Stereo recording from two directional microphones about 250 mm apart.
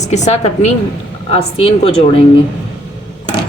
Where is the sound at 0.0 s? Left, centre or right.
Left.